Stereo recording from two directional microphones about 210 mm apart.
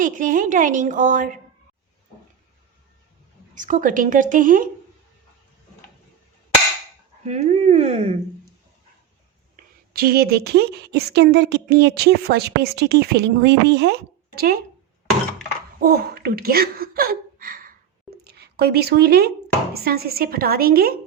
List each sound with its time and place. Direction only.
0.0 s a woman's voice: 40° right (ahead or behind)
3.5 s a woman's voice: 40° right (ahead or behind)
7.3 s speech: 30° right (ahead or behind)
9.9 s speech: 45° right (ahead or behind)
15.8 s speech: 50° right (ahead or behind)